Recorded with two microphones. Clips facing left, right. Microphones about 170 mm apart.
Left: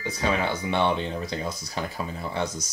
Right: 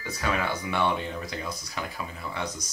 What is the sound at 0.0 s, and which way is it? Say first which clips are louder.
Speech: left 3 dB; 25° left (ahead or behind).